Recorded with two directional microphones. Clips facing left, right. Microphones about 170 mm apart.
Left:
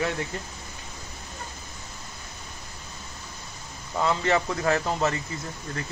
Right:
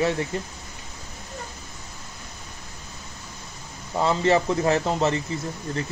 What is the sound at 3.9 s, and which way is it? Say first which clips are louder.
Speech: right 4 dB; 25° right (ahead or behind).